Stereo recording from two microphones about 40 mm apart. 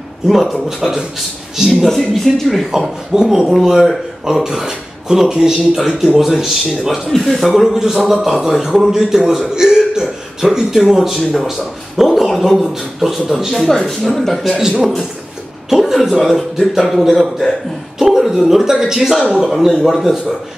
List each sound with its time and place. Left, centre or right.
0.3 s a man's voice: centre
1.7 s speech: centre
3.1 s a man's voice: centre
4.3 s a man's voice: centre
10.4 s a man's voice: centre
14.6 s speech: centre
15.7 s a man's voice: centre